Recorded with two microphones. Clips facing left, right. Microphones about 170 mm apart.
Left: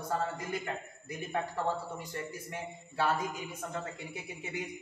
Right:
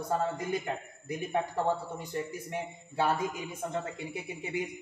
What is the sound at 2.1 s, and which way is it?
A man's voice, 20° right (ahead or behind).